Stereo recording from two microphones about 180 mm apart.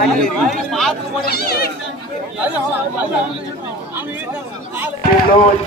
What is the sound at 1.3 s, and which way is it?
Speech, 60° left (ahead or behind).